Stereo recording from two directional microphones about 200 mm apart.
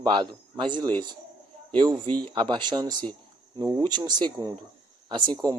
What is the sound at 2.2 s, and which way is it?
A man's voice, 25° right (ahead or behind).